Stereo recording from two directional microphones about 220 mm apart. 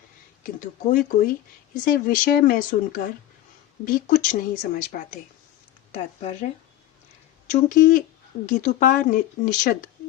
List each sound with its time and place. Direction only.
0.4 s speech: 40° left (ahead or behind)
5.9 s speech: 30° left (ahead or behind)
7.7 s speech: 40° left (ahead or behind)